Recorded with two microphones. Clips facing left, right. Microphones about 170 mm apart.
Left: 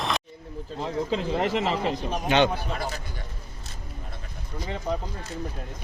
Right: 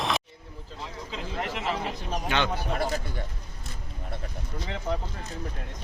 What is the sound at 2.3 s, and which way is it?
Speech, 20° left (ahead or behind).